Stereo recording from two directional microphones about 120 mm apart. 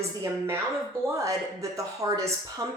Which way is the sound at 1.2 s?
25° right (ahead or behind).